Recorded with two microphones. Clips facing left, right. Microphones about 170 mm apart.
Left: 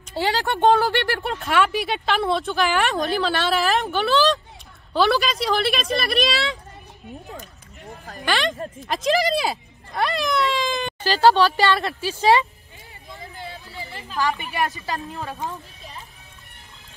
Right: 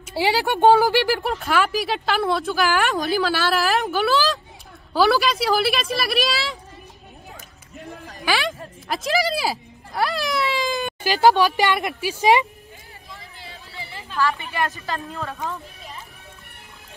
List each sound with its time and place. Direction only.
0.1 s speech: 10° right (ahead or behind)
8.3 s speech: 5° right (ahead or behind)
13.4 s a sound: 40° left (ahead or behind)
14.1 s a woman's voice: 15° left (ahead or behind)